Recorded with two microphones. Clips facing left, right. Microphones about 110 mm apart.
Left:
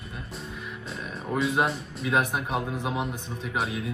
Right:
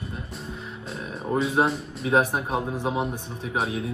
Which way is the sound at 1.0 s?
30° right (ahead or behind).